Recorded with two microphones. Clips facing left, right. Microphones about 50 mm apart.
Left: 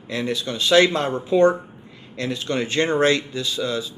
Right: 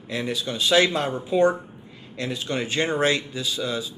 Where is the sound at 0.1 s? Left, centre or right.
Centre.